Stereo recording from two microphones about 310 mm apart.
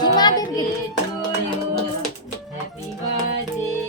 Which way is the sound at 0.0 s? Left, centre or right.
Centre.